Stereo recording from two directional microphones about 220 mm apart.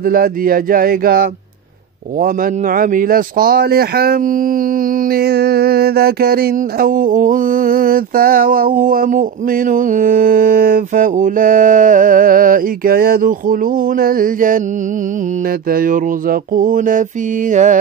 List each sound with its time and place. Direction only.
0.1 s music: 40° right (ahead or behind)
15.7 s music: 40° right (ahead or behind)